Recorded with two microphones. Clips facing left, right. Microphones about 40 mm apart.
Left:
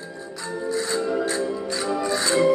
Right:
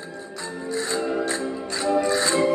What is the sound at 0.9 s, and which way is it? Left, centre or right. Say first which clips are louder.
Music: even; right.